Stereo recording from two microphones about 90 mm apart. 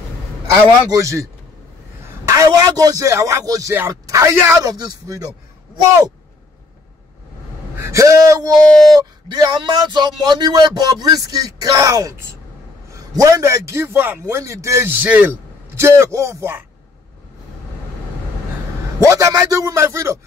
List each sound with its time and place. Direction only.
0.9 s speech: 35° right (ahead or behind)
4.6 s speech: 45° right (ahead or behind)
7.8 s a man's voice: 35° right (ahead or behind); by 15.8 s 20° right (ahead or behind)
15.8 s speech: 30° right (ahead or behind)
18.9 s speech: 35° right (ahead or behind)